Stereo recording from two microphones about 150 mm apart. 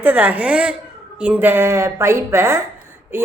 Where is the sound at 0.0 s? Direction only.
10° right (ahead or behind).